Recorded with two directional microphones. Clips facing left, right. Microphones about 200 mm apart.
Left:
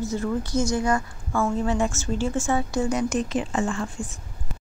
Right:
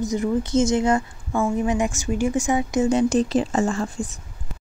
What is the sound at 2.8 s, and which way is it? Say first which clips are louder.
Speech: right 6 dB; 30° right (ahead or behind).